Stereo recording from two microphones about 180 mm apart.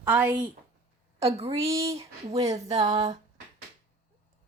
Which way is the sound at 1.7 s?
15° right (ahead or behind).